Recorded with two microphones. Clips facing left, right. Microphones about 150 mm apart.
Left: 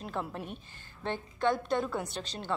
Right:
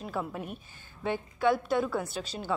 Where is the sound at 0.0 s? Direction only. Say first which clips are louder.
Right 2 dB; 5° right (ahead or behind).